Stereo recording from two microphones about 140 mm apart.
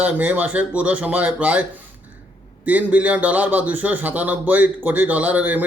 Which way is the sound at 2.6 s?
10° right (ahead or behind).